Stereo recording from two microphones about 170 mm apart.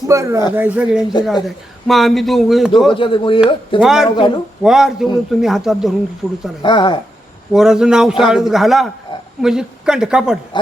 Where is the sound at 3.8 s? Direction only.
Centre (ahead or behind).